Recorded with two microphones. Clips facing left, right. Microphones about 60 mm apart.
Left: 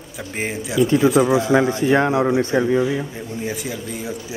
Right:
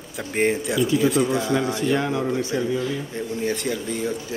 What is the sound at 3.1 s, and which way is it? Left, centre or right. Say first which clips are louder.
Speech: right 2 dB; centre.